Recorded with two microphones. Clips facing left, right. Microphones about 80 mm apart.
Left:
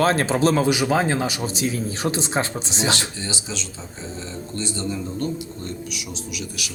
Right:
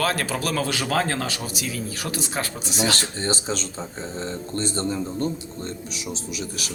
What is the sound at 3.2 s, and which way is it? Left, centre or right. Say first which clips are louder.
A man's voice: right 4 dB; right.